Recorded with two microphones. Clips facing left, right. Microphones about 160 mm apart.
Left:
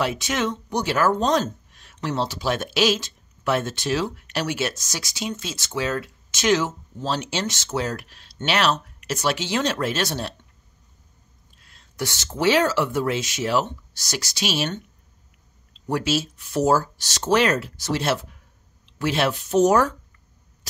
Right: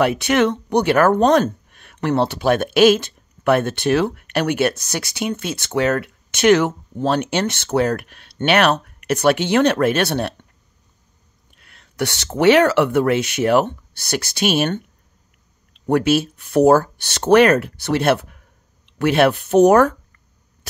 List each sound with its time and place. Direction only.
0.0 s speech: 60° right (ahead or behind)
11.5 s speech: 65° right (ahead or behind)